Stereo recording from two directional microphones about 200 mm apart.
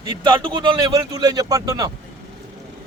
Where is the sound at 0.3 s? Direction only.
20° right (ahead or behind).